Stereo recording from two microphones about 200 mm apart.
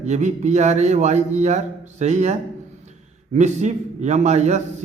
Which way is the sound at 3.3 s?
35° right (ahead or behind).